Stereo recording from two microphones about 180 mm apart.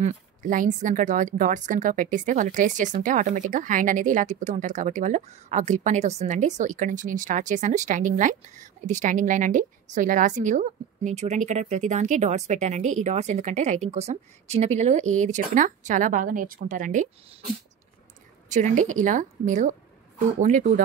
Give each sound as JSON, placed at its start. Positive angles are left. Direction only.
{"t": 0.0, "sound": "a woman's voice", "side_deg": -45}
{"t": 18.5, "sound": "a woman's voice", "side_deg": -45}